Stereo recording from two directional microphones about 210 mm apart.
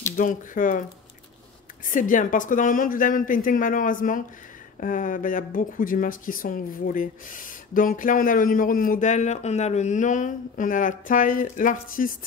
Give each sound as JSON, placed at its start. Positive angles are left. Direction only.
{"t": 0.2, "sound": "speech", "side_deg": 40}
{"t": 1.9, "sound": "speech", "side_deg": 40}